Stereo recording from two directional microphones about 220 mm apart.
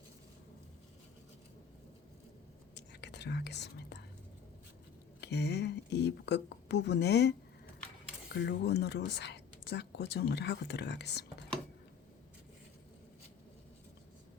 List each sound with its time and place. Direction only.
2.7 s whispering: 50° left (ahead or behind)
5.2 s speech: 50° left (ahead or behind)